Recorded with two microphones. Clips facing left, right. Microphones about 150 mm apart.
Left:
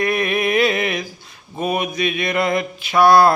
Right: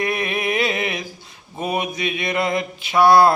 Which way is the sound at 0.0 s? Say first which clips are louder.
Left 4 dB; 25° right (ahead or behind).